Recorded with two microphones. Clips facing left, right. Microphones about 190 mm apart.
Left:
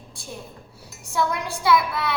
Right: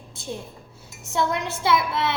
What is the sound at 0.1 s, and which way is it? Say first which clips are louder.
Dishes: right 6 dB; 20° right (ahead or behind).